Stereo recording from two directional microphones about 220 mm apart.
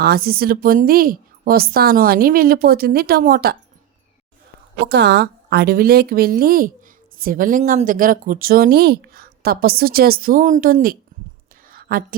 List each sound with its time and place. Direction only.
0.0 s a woman's voice: 45° right (ahead or behind)
4.9 s a woman's voice: 50° right (ahead or behind)
11.7 s a sound: 40° right (ahead or behind)